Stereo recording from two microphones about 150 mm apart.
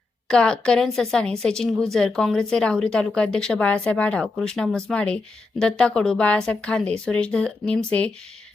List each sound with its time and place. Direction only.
0.3 s speech: 5° left (ahead or behind)